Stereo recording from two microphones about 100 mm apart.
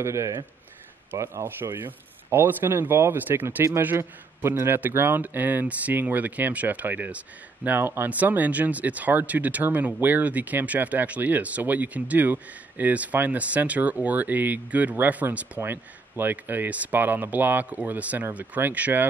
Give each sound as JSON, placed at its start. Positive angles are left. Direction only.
{"t": 0.0, "sound": "speech", "side_deg": -30}